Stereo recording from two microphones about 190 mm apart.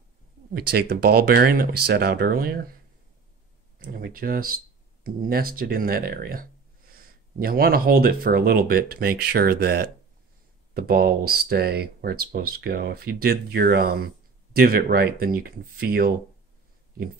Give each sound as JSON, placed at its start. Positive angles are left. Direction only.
{"t": 0.5, "sound": "speech", "side_deg": -55}
{"t": 3.7, "sound": "speech", "side_deg": -50}